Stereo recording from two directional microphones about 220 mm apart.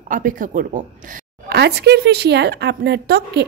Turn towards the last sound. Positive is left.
turn(degrees=-50)  # may be behind; listen again after turning